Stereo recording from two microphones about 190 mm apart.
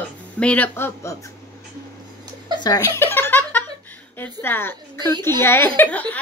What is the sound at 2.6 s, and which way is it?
Speech, 20° left (ahead or behind).